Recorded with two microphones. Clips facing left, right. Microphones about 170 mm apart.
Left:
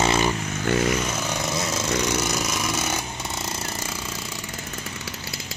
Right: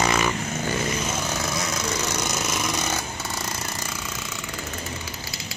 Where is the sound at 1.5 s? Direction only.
25° left (ahead or behind).